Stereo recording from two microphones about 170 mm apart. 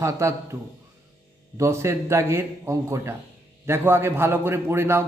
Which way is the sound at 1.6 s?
15° right (ahead or behind).